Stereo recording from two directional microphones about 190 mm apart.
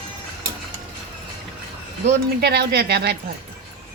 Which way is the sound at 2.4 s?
55° right (ahead or behind).